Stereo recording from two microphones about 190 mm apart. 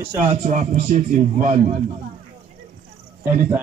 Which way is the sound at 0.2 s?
40° right (ahead or behind).